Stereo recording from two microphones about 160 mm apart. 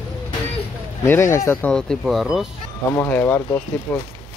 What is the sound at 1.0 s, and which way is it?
Speech, 15° left (ahead or behind).